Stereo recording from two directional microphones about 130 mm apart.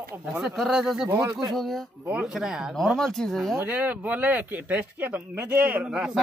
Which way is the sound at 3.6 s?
10° right (ahead or behind).